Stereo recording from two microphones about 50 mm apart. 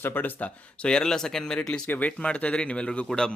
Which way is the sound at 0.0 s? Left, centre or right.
Left.